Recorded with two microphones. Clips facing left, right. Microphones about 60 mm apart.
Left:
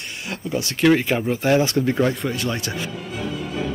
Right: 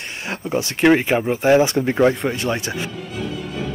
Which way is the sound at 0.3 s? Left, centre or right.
Right.